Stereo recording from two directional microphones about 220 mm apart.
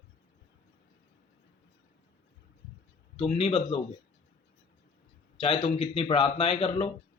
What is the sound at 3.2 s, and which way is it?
Speech, 25° left (ahead or behind).